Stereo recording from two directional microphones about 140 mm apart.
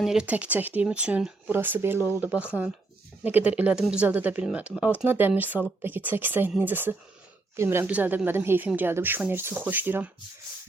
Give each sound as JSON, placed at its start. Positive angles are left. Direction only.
{"t": 0.0, "sound": "speech", "side_deg": -5}